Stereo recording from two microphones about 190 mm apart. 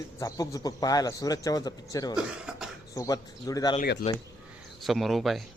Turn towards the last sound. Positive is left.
turn(degrees=0)  # may be behind; listen again after turning